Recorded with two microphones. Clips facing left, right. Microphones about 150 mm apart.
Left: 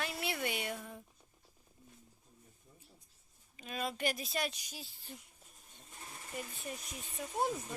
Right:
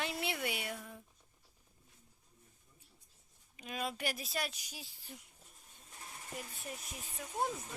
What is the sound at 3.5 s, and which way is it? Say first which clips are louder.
Speech: left 1 dB; 10° right (ahead or behind).